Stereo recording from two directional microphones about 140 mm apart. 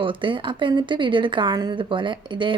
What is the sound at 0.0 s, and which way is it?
A woman's voice, 35° right (ahead or behind).